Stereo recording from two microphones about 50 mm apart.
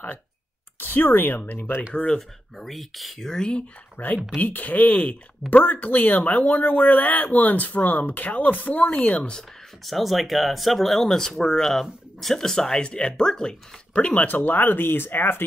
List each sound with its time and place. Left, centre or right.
0.7 s speech: left
2.1 s speech: centre
4.0 s speech: left
9.8 s speech: centre
14.0 s speech: left